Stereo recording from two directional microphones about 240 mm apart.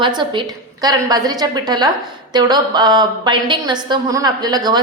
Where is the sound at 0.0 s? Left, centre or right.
Centre.